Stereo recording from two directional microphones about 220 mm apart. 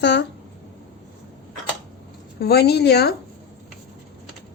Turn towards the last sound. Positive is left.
turn(degrees=50)  # may be behind; listen again after turning